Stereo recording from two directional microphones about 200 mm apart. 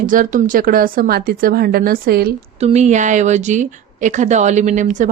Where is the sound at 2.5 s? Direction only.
35° right (ahead or behind).